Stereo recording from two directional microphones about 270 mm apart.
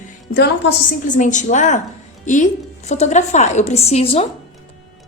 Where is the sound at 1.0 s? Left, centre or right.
Left.